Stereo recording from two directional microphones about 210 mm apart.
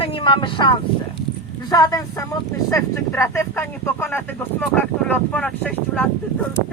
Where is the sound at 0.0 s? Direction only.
25° left (ahead or behind).